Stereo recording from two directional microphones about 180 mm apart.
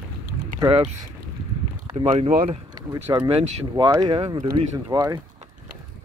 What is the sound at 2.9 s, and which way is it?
Speech, 20° right (ahead or behind).